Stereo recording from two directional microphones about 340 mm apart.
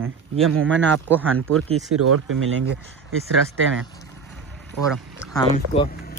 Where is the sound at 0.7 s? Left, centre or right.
Centre.